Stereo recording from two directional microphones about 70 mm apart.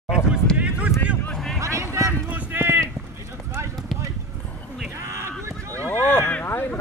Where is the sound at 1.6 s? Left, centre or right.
Right.